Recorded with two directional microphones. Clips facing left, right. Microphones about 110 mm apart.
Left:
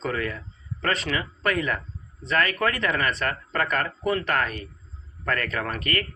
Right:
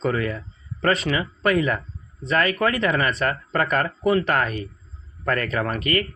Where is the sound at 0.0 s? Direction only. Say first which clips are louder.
Right 5 dB; 15° right (ahead or behind).